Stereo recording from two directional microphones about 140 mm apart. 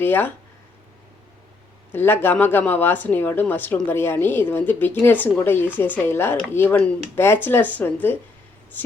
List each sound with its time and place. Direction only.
0.0 s a woman's voice: 15° left (ahead or behind)
1.9 s a woman's voice: 15° left (ahead or behind)